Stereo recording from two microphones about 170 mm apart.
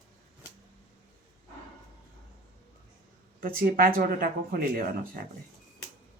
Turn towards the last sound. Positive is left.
turn(degrees=-55)  # may be behind; listen again after turning